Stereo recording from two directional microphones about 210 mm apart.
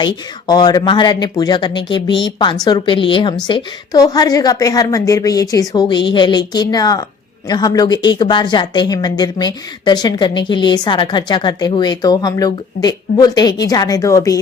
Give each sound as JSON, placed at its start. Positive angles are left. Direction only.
{"t": 0.0, "sound": "a woman's voice", "side_deg": 20}